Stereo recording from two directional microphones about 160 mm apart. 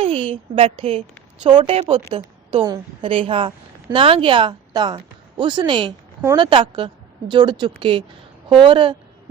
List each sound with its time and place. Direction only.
0.0 s a woman's voice: 35° right (ahead or behind)